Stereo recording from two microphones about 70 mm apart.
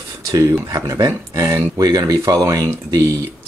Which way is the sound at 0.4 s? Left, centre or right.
Right.